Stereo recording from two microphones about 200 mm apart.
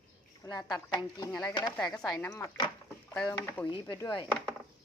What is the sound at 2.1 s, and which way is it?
Speech, 15° left (ahead or behind).